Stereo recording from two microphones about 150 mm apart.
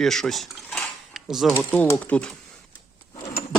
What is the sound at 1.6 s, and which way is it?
Speech, 10° left (ahead or behind).